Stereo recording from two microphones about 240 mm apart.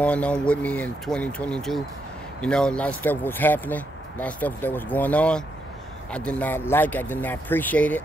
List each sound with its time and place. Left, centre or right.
0.0 s speech: centre